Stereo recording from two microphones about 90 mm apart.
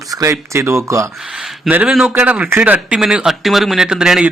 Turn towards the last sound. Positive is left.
turn(degrees=-5)  # may be behind; listen again after turning